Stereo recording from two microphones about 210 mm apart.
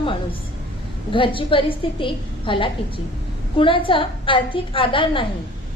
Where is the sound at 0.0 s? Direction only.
25° left (ahead or behind).